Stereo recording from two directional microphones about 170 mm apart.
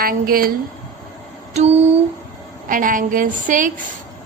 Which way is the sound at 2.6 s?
55° right (ahead or behind).